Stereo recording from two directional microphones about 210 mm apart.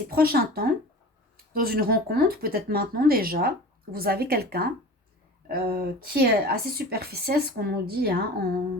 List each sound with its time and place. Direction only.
0.1 s speech: 45° right (ahead or behind)